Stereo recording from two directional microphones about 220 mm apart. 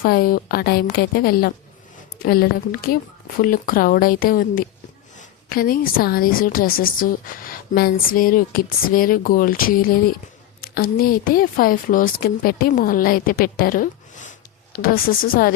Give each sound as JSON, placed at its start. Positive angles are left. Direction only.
{"t": 0.0, "sound": "a woman's voice", "side_deg": 40}